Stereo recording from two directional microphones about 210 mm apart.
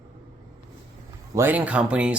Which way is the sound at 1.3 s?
10° right (ahead or behind).